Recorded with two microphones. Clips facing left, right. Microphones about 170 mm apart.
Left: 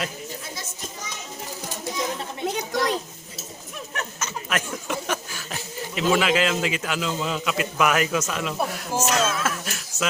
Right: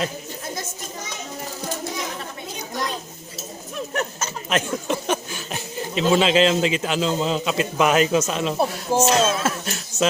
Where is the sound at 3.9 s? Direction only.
35° right (ahead or behind).